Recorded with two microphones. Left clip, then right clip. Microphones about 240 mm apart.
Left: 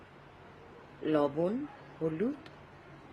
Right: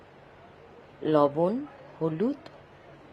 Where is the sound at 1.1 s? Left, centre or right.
Centre.